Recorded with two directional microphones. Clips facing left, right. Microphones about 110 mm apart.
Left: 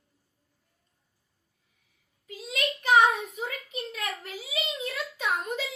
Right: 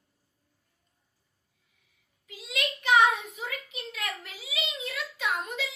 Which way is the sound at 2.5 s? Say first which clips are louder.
Left 1 dB; 30° left (ahead or behind).